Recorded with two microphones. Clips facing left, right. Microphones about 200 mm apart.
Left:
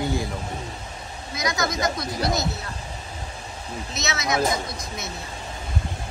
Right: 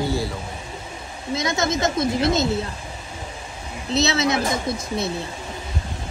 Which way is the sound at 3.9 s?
30° right (ahead or behind).